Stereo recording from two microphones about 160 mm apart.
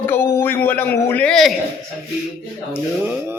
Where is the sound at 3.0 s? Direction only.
10° right (ahead or behind).